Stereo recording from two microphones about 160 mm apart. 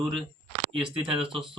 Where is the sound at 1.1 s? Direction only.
35° right (ahead or behind).